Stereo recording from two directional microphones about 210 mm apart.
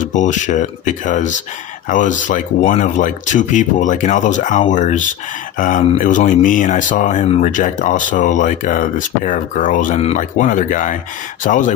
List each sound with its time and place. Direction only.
0.0 s speech: 35° left (ahead or behind)